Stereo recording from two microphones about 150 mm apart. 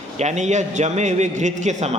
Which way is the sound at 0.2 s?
50° right (ahead or behind).